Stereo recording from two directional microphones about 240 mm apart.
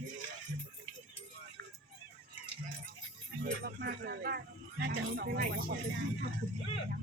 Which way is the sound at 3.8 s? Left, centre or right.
Right.